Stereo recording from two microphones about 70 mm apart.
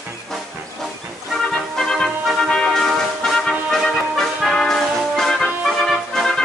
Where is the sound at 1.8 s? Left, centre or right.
Centre.